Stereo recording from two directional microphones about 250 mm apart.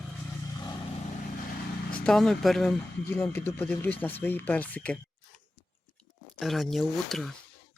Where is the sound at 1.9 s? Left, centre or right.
Centre.